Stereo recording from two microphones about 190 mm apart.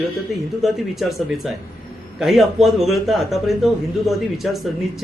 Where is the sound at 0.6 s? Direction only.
Centre (ahead or behind).